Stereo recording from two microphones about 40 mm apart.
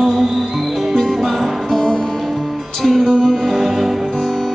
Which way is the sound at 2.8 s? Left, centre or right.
Centre.